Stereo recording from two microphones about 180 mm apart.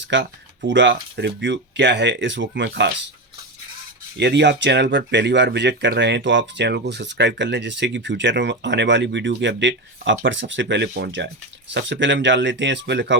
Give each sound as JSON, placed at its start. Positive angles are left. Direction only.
{"t": 0.0, "sound": "speech", "side_deg": -75}
{"t": 4.2, "sound": "speech", "side_deg": -70}
{"t": 11.7, "sound": "speech", "side_deg": -85}